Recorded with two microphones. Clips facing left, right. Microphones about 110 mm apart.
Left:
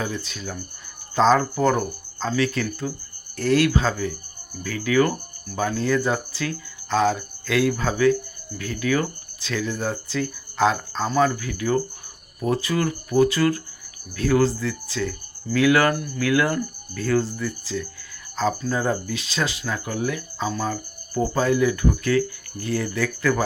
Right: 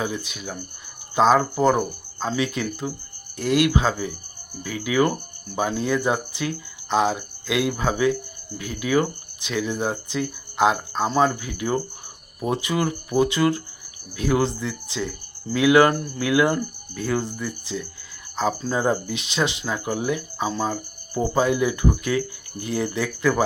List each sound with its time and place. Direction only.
0.0 s speech: 15° right (ahead or behind)